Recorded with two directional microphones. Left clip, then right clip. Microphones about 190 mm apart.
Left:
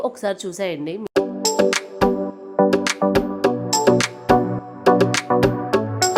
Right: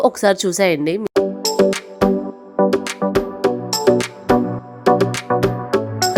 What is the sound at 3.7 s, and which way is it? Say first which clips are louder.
Music: left 1 dB; 5° right (ahead or behind).